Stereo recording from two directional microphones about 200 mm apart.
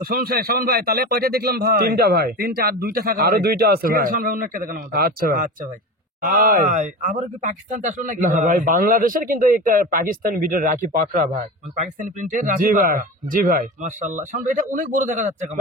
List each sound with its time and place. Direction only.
0.0 s a man's voice: 50° right (ahead or behind)